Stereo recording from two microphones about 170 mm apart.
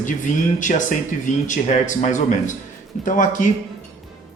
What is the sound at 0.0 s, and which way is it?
Speech, 45° left (ahead or behind).